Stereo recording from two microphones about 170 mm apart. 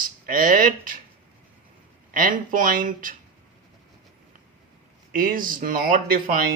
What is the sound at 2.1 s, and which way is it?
Speech, 50° right (ahead or behind).